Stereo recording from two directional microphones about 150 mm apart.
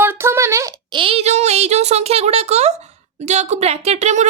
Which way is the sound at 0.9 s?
35° right (ahead or behind).